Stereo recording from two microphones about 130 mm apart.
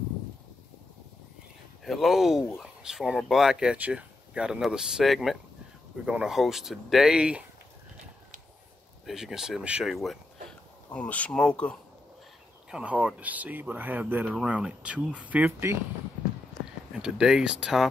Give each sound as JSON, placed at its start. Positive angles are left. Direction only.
{"t": 1.9, "sound": "speech", "side_deg": 0}
{"t": 9.0, "sound": "speech", "side_deg": -5}
{"t": 10.9, "sound": "speech", "side_deg": 10}
{"t": 12.7, "sound": "speech", "side_deg": -10}
{"t": 17.0, "sound": "speech", "side_deg": -5}